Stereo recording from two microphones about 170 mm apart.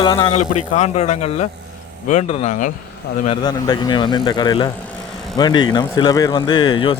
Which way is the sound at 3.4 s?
25° left (ahead or behind).